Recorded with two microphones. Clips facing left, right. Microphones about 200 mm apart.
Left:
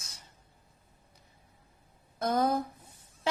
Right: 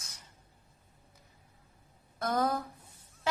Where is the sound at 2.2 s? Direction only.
25° left (ahead or behind).